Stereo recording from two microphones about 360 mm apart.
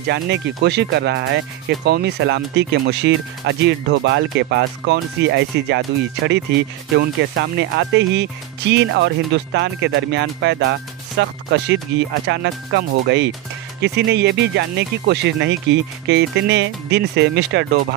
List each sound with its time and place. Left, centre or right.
0.0 s speech: right